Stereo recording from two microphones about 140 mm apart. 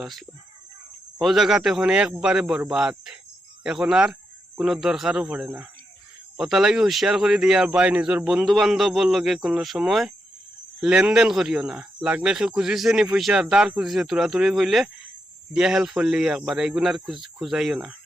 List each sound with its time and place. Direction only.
0.0 s speech: centre (ahead or behind)